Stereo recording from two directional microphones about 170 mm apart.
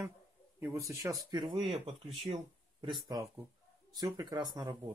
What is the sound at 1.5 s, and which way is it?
Speech, 30° right (ahead or behind).